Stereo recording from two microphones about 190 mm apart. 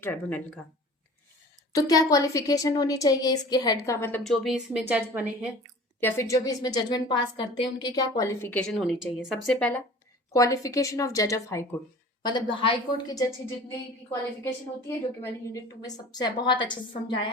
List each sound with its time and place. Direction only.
0.0 s a woman's voice: 10° left (ahead or behind)
1.7 s a woman's voice: 20° left (ahead or behind)
4.2 s speech: centre (ahead or behind)
6.0 s a woman's voice: 10° left (ahead or behind)
10.3 s a woman's voice: 15° left (ahead or behind)
14.8 s a woman's voice: 15° left (ahead or behind)